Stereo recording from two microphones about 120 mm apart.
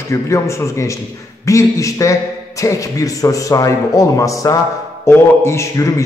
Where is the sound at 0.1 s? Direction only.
25° left (ahead or behind).